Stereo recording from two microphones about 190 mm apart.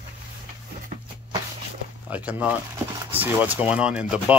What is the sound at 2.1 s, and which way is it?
Speech, 5° right (ahead or behind).